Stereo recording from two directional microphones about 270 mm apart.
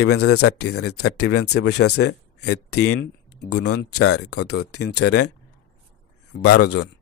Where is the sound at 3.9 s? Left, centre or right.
Left.